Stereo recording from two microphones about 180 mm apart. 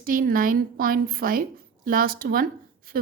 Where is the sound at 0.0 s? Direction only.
50° right (ahead or behind).